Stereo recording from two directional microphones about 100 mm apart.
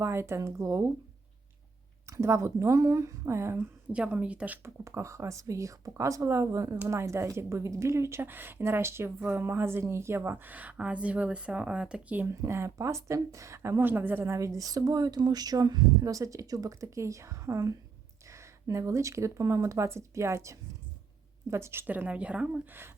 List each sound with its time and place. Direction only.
0.0 s speech: 25° right (ahead or behind)
2.0 s speech: 30° right (ahead or behind)
3.9 s speech: 10° right (ahead or behind)
4.8 s speech: 30° right (ahead or behind)
12.3 s speech: 25° right (ahead or behind)
14.3 s speech: 30° right (ahead or behind); by 22.6 s 10° right (ahead or behind)